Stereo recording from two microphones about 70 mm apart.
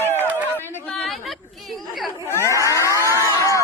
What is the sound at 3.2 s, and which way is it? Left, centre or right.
Crowd, left.